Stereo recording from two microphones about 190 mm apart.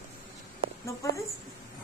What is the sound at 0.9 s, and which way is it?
Speech, 15° left (ahead or behind).